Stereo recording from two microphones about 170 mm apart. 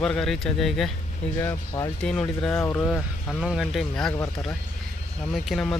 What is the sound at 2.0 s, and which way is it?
Speech, 5° left (ahead or behind).